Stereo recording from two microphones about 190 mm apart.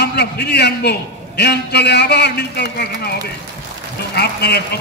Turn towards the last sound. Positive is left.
turn(degrees=60)  # may be behind; listen again after turning